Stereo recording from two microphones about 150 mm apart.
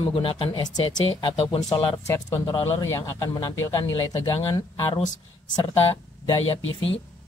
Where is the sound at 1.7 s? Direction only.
20° left (ahead or behind).